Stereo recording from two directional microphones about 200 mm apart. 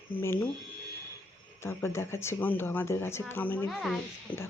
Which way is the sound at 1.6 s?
10° left (ahead or behind).